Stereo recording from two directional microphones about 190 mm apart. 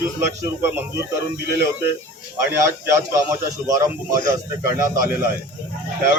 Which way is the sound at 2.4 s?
15° right (ahead or behind).